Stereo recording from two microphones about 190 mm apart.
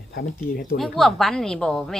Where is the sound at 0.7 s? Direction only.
Centre (ahead or behind).